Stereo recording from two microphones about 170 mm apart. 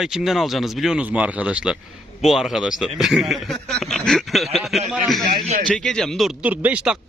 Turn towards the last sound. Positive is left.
turn(degrees=-10)  # may be behind; listen again after turning